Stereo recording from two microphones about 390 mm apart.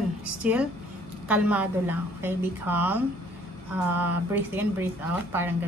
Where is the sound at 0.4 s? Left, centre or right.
Centre.